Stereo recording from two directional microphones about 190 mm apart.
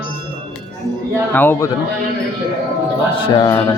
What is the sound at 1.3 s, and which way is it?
Speech, 10° left (ahead or behind).